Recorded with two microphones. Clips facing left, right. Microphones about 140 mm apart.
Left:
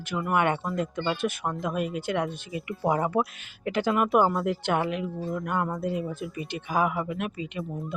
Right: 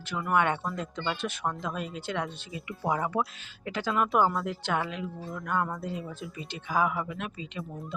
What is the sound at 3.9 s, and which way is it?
Speech, 10° left (ahead or behind).